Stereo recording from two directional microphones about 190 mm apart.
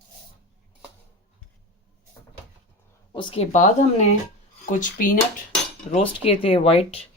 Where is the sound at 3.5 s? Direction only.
40° left (ahead or behind).